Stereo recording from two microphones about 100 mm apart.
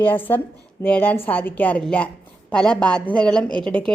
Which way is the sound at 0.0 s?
20° left (ahead or behind).